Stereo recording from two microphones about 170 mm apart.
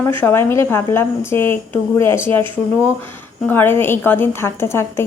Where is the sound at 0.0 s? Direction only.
15° left (ahead or behind).